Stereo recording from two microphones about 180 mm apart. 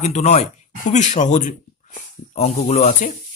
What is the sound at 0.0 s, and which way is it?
Speech, 40° left (ahead or behind).